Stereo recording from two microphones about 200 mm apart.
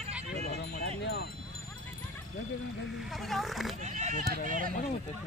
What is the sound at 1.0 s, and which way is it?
Wind chime, 55° left (ahead or behind).